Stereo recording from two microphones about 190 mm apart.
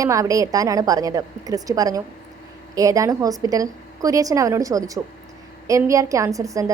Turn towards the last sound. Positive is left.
turn(degrees=-15)  # may be behind; listen again after turning